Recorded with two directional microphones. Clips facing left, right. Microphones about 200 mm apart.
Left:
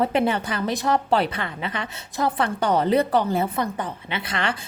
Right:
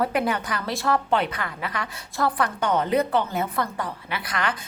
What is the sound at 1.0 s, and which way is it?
Speech, 35° left (ahead or behind).